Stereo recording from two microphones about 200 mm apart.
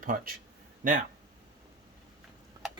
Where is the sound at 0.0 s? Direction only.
40° right (ahead or behind).